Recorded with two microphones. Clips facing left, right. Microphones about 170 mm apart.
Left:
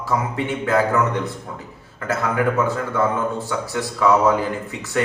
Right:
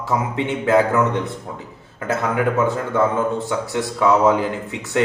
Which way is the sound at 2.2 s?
20° right (ahead or behind).